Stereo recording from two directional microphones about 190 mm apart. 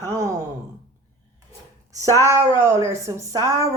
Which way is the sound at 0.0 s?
15° right (ahead or behind).